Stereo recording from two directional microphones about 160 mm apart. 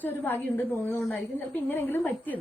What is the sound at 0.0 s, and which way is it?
Speech, 10° left (ahead or behind).